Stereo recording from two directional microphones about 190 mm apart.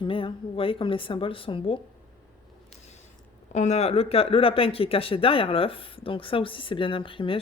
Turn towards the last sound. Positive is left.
turn(degrees=25)  # may be behind; listen again after turning